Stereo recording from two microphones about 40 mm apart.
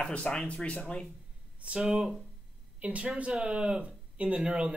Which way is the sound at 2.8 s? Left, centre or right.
Right.